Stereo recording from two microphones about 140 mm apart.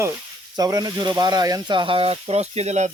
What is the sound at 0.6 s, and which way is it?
Speech, 30° right (ahead or behind).